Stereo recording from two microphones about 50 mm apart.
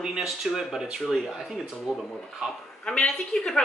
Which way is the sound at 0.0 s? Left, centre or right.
Centre.